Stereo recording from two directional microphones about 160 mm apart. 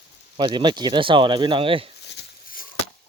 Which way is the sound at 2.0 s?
75° left (ahead or behind).